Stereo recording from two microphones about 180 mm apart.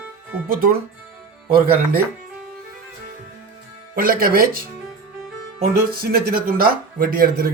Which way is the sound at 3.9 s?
55° right (ahead or behind).